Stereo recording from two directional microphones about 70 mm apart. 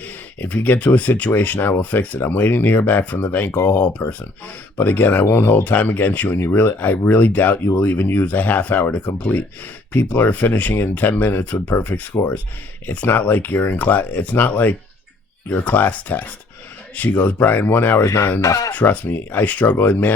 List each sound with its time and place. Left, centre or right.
0.0 s speech: left
3.5 s speech: left
3.8 s speech: left
18.0 s speech: left
18.7 s speech: left